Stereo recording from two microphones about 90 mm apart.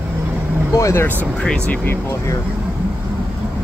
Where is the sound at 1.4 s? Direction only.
10° left (ahead or behind).